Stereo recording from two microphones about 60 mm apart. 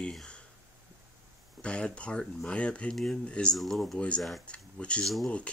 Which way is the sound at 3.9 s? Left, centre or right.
Centre.